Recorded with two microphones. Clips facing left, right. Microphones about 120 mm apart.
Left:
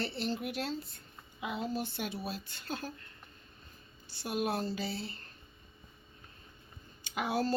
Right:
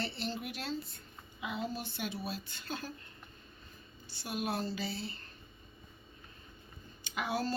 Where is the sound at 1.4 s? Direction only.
Centre (ahead or behind).